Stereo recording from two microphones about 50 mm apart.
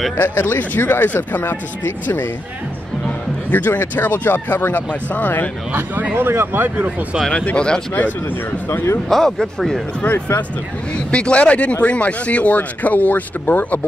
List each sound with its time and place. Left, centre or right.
0.5 s speech: left
3.4 s speech: left
5.7 s speech: right
6.1 s speech: right
7.5 s speech: centre
7.9 s speech: left
9.1 s speech: centre
10.0 s speech: left
11.1 s speech: left